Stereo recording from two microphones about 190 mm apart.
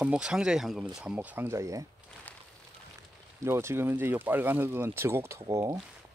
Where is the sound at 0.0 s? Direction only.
5° right (ahead or behind).